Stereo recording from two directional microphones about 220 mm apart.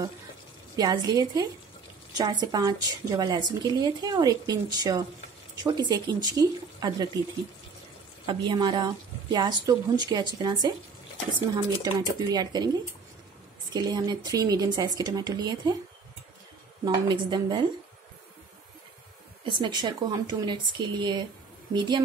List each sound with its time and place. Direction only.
0.7 s a woman's voice: 15° right (ahead or behind)
8.3 s a woman's voice: 20° right (ahead or behind)
13.7 s speech: 20° right (ahead or behind)
16.8 s a woman's voice: 20° right (ahead or behind)
19.6 s a woman's voice: 20° right (ahead or behind)